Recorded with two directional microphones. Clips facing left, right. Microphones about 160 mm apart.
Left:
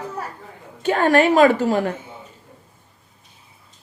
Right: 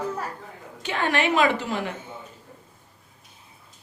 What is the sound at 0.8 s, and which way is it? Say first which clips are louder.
A woman's voice: left 9 dB; 45° left (ahead or behind).